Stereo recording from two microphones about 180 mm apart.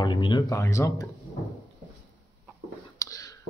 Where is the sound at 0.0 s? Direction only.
25° left (ahead or behind).